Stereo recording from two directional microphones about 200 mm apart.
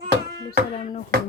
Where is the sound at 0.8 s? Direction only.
40° left (ahead or behind).